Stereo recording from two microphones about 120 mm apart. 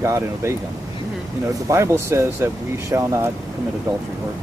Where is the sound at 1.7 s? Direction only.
25° right (ahead or behind).